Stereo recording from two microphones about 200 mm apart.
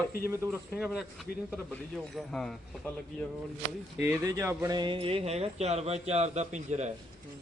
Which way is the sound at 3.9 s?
15° right (ahead or behind).